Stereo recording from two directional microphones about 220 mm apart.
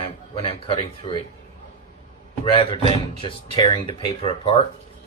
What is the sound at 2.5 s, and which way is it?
Speech, 25° left (ahead or behind).